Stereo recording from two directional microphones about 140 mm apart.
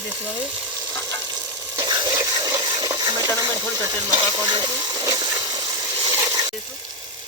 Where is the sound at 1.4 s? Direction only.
30° right (ahead or behind).